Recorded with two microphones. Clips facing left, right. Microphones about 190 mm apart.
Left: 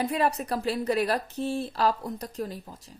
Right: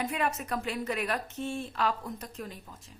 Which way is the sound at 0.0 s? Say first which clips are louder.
Left 5 dB; 35° left (ahead or behind).